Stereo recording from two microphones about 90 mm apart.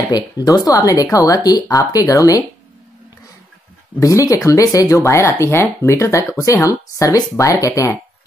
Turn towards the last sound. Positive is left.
turn(degrees=35)  # may be behind; listen again after turning